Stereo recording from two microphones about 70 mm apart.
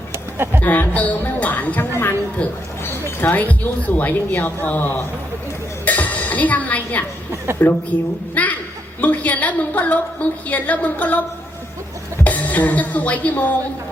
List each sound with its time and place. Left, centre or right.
0.6 s a woman's voice: left
2.8 s a sound: left
3.8 s a woman's voice: left
5.8 s music: left
7.6 s a woman's voice: left
8.4 s laughter: left
9.0 s a woman's voice: left
12.2 s music: left